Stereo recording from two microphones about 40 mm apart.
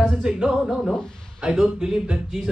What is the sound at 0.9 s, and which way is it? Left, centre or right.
Speech, centre.